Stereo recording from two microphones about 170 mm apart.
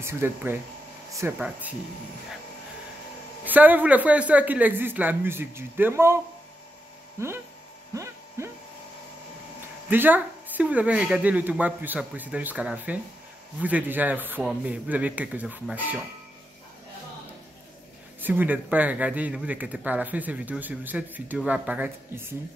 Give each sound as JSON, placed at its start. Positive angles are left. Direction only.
{"t": 0.0, "sound": "speech", "side_deg": -15}
{"t": 3.4, "sound": "speech", "side_deg": -10}
{"t": 7.2, "sound": "speech", "side_deg": -15}
{"t": 7.9, "sound": "a sound", "side_deg": -15}
{"t": 9.8, "sound": "speech", "side_deg": -10}
{"t": 18.2, "sound": "speech", "side_deg": -10}